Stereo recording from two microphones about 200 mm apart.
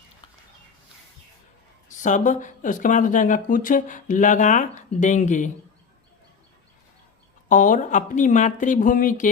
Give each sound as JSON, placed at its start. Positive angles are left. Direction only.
{"t": 2.0, "sound": "speech", "side_deg": 40}
{"t": 7.4, "sound": "speech", "side_deg": 40}